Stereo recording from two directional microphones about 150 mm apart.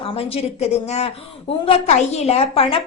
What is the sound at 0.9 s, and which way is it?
A woman's voice, 45° left (ahead or behind).